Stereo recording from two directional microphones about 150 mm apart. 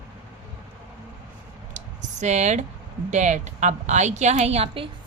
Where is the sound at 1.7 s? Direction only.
55° right (ahead or behind).